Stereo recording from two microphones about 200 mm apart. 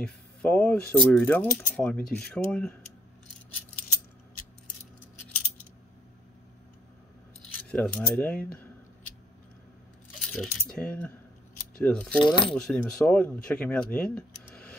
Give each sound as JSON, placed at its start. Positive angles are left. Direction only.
{"t": 0.0, "sound": "speech", "side_deg": 5}
{"t": 7.5, "sound": "coin", "side_deg": 5}
{"t": 10.2, "sound": "speech", "side_deg": 0}
{"t": 12.2, "sound": "coin", "side_deg": 25}
{"t": 12.5, "sound": "speech", "side_deg": 5}